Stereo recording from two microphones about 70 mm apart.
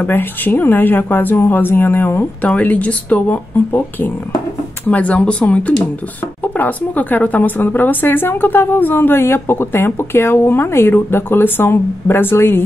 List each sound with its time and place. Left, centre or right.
0.0 s speech: left